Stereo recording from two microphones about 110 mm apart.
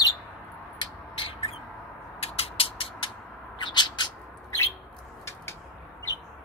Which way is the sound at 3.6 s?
40° left (ahead or behind).